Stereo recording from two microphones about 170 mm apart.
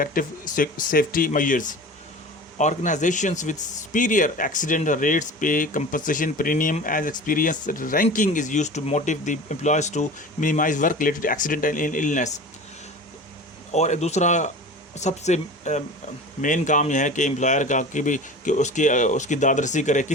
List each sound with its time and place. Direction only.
0.0 s speech: 55° left (ahead or behind)
13.7 s speech: 40° left (ahead or behind)